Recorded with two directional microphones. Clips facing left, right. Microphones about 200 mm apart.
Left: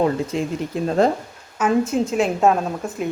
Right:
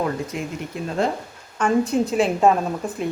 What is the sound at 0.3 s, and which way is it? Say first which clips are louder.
Speech: left 5 dB; 30° left (ahead or behind).